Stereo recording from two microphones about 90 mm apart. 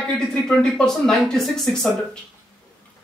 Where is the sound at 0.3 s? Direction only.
10° left (ahead or behind).